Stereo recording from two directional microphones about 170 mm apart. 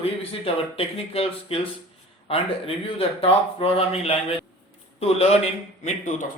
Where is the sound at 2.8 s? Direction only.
35° left (ahead or behind).